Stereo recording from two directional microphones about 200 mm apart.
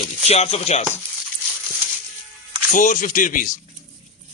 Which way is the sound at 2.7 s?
40° left (ahead or behind).